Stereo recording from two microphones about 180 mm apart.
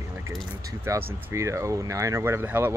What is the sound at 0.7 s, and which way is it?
Speech, 15° right (ahead or behind).